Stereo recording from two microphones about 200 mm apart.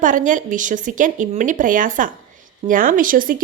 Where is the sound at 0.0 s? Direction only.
40° right (ahead or behind).